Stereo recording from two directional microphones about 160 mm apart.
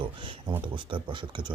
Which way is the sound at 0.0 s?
30° right (ahead or behind).